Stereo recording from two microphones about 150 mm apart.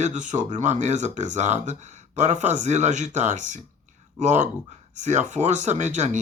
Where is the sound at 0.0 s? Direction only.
55° right (ahead or behind).